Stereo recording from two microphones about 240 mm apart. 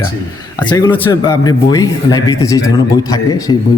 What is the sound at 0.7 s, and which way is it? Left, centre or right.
Speech, centre.